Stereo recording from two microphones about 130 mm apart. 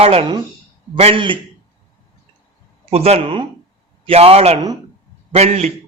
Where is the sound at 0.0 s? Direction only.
50° right (ahead or behind).